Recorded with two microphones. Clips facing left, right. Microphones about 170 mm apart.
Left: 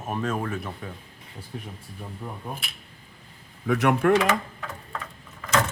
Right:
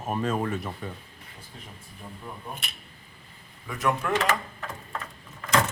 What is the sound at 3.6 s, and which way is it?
Speech, 70° left (ahead or behind).